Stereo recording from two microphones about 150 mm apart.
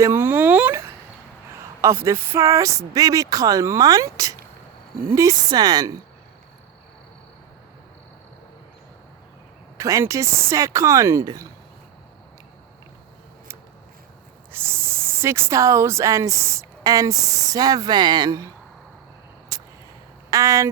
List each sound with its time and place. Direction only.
0.0 s a sound: 15° right (ahead or behind)
1.8 s speech: 20° right (ahead or behind)
9.7 s speech: 20° right (ahead or behind)
14.5 s speech: 15° right (ahead or behind)
19.5 s a sound: 25° right (ahead or behind)
20.3 s speech: 20° right (ahead or behind)